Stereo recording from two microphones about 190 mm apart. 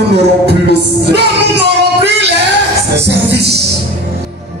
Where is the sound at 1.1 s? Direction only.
65° right (ahead or behind).